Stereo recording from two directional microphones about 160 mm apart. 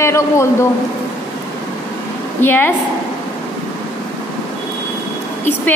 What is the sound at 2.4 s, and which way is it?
Speech, 15° left (ahead or behind).